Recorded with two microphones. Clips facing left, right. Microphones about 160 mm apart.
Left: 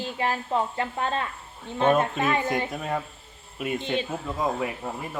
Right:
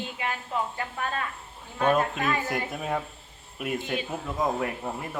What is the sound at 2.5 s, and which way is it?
Speech, centre (ahead or behind).